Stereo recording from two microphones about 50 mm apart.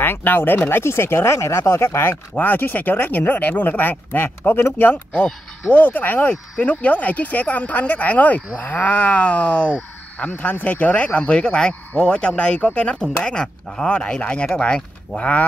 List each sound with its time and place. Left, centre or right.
0.0 s speech: left
2.3 s speech: left
11.1 s speech: left